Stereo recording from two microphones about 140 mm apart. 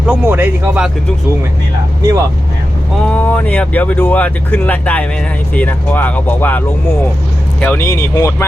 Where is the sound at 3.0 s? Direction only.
10° left (ahead or behind).